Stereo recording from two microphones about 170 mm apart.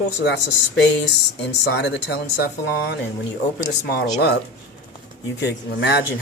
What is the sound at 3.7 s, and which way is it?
Speech, 70° left (ahead or behind).